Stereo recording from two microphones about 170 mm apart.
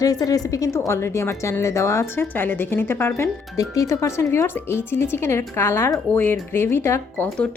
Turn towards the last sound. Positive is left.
turn(degrees=5)  # may be behind; listen again after turning